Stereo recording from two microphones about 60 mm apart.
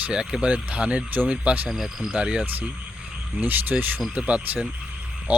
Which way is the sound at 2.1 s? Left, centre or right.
Centre.